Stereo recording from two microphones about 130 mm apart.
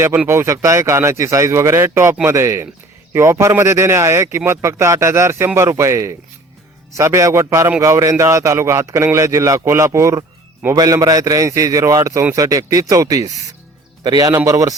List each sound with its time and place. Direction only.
0.3 s speech: 20° right (ahead or behind)